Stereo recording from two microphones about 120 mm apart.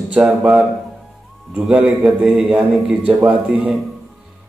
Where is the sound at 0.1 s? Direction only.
10° right (ahead or behind).